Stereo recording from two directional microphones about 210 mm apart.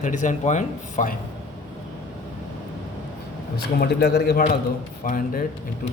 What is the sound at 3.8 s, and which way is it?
A man's voice, 50° left (ahead or behind).